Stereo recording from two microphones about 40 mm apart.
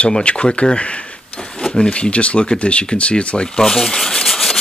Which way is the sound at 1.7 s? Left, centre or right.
Left.